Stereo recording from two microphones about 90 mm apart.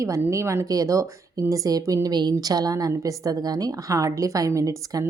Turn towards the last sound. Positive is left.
turn(degrees=-40)  # may be behind; listen again after turning